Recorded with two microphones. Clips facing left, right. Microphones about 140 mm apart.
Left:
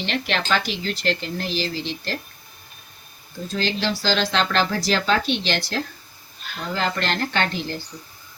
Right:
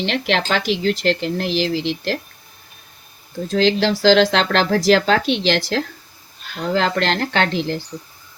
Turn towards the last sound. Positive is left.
turn(degrees=-90)